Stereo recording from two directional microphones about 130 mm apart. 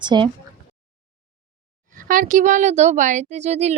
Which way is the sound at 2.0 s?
90° right.